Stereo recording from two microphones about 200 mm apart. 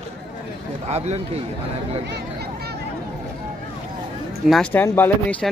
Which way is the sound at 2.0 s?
55° right (ahead or behind).